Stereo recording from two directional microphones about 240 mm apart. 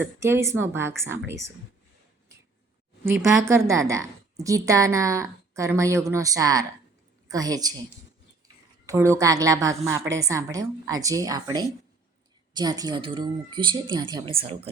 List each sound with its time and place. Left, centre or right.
0.2 s a woman's voice: centre
3.5 s a woman's voice: centre
8.9 s a woman's voice: centre